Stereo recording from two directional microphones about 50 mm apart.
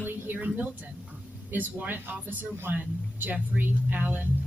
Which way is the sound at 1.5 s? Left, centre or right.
Right.